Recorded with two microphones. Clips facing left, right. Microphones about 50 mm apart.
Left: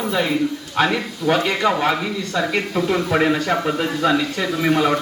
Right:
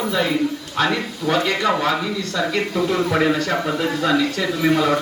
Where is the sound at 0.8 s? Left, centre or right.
Centre.